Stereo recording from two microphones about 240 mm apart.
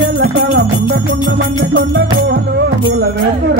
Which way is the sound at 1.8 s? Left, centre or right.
Right.